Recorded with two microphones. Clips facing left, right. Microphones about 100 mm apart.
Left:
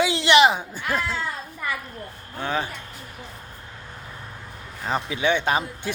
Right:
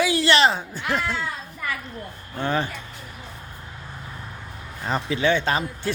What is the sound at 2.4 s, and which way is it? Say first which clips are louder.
Speech: right 2 dB; 5° left (ahead or behind).